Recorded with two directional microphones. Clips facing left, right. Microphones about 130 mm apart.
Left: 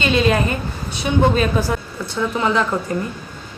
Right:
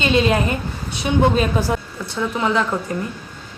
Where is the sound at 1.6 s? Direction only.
25° right (ahead or behind).